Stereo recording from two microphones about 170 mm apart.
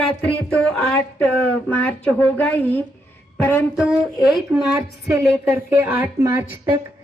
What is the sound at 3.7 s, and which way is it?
Speech, 5° right (ahead or behind).